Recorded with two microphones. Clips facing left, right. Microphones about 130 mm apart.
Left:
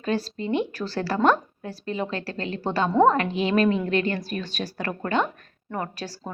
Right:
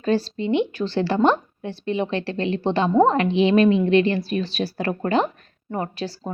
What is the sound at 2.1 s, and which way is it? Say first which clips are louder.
Speech: right 5 dB; 35° left (ahead or behind).